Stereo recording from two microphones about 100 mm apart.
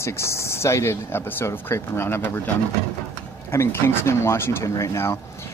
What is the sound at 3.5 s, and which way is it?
Speech, 25° left (ahead or behind).